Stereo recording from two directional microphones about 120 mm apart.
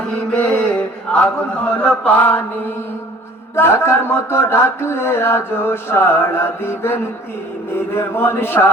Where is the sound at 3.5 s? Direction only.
20° left (ahead or behind).